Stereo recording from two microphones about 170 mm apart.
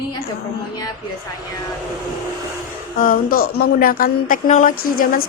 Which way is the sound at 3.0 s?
55° left (ahead or behind).